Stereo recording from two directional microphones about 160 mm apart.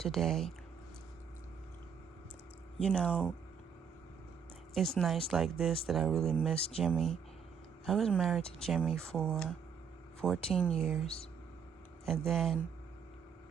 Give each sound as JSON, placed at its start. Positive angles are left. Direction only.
{"t": 0.0, "sound": "speech", "side_deg": 0}
{"t": 2.8, "sound": "speech", "side_deg": 5}
{"t": 4.7, "sound": "speech", "side_deg": 0}
{"t": 11.0, "sound": "speech", "side_deg": 40}
{"t": 12.0, "sound": "speech", "side_deg": 0}